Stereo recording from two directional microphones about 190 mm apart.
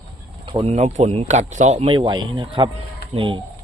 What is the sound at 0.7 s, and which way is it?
Speech, 35° right (ahead or behind).